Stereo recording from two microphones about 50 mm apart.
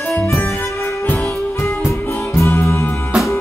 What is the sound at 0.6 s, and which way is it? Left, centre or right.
Music, left.